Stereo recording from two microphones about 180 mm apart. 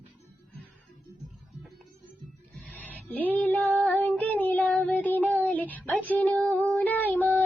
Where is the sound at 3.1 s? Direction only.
10° left (ahead or behind).